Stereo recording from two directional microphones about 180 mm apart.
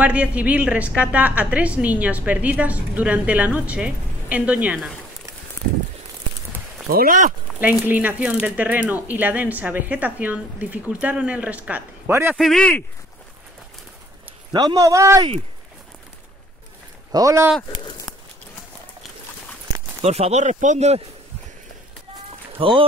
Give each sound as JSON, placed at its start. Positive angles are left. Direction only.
{"t": 0.0, "sound": "a woman's voice", "side_deg": -5}
{"t": 6.9, "sound": "speech", "side_deg": -55}
{"t": 7.6, "sound": "a woman's voice", "side_deg": -10}
{"t": 12.4, "sound": "speech", "side_deg": 0}
{"t": 14.5, "sound": "speech", "side_deg": -20}
{"t": 17.1, "sound": "a woman's voice", "side_deg": -20}
{"t": 20.0, "sound": "speech", "side_deg": -35}
{"t": 22.6, "sound": "speech", "side_deg": -30}